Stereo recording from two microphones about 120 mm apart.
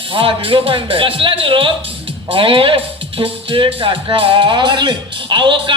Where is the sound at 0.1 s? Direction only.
50° right (ahead or behind).